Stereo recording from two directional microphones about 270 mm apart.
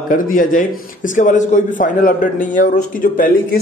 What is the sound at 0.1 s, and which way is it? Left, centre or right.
A man's voice, left.